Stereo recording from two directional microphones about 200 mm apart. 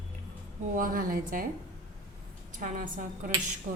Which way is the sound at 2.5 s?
40° right (ahead or behind).